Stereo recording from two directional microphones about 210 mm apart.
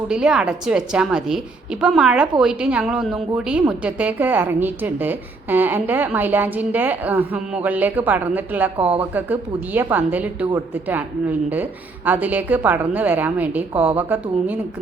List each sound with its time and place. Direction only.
0.1 s a woman's voice: 5° right (ahead or behind)
8.8 s speech: 25° right (ahead or behind)
9.1 s a woman's voice: 10° right (ahead or behind)